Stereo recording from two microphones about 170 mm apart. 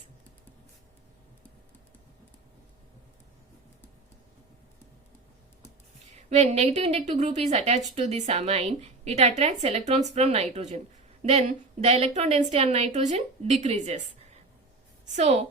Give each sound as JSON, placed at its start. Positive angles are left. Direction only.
{"t": 6.3, "sound": "a woman's voice", "side_deg": -40}
{"t": 15.0, "sound": "a woman's voice", "side_deg": -40}